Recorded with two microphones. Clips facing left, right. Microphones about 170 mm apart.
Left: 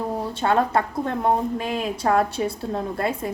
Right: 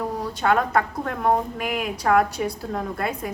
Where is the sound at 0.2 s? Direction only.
25° left (ahead or behind).